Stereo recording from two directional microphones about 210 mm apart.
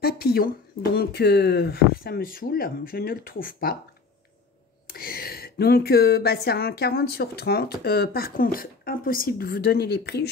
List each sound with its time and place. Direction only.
0.0 s speech: 45° left (ahead or behind)
4.8 s speech: 45° left (ahead or behind)